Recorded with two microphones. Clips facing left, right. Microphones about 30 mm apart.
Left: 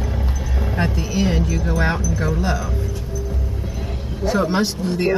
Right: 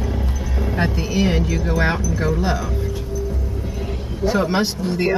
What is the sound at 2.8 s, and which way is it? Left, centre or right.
Music, centre.